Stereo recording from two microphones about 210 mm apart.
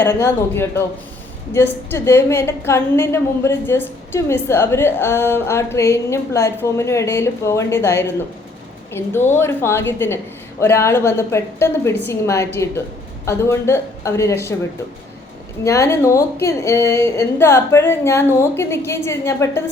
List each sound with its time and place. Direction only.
0.0 s a woman's voice: 10° left (ahead or behind)
15.6 s a woman's voice: 15° left (ahead or behind)